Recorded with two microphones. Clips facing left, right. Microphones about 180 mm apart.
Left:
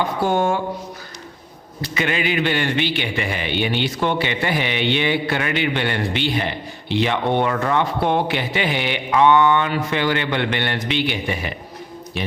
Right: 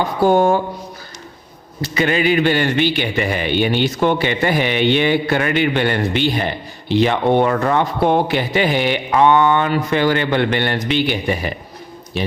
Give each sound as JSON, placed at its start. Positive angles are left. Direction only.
{"t": 0.2, "sound": "speech", "side_deg": -40}
{"t": 2.0, "sound": "a man's voice", "side_deg": -40}